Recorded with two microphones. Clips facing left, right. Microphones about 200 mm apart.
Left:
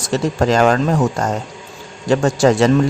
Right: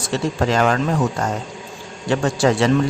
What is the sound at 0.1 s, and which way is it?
Speech, 40° left (ahead or behind).